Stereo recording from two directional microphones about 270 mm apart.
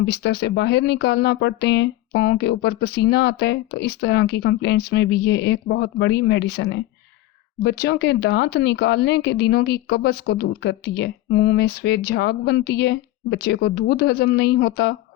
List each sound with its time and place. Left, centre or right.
0.0 s speech: left